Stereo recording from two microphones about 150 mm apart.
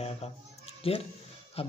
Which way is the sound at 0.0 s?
45° left (ahead or behind).